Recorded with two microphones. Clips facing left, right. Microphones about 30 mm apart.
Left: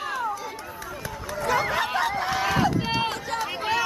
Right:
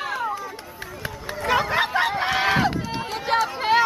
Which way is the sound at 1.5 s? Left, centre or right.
Right.